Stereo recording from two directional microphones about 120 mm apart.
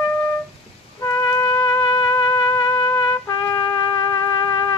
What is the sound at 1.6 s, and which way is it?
Music, 45° left (ahead or behind).